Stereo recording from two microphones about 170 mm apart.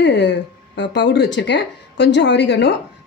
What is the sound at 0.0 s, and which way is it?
A woman's voice, 90° left.